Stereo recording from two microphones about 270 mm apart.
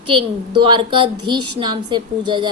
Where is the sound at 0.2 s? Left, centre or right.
Centre.